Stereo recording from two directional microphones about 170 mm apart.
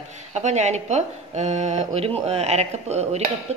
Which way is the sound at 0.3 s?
45° right (ahead or behind).